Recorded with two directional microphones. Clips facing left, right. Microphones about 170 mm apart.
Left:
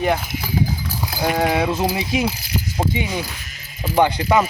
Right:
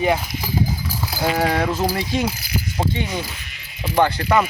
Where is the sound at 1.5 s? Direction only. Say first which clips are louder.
Left 1 dB; 10° left (ahead or behind).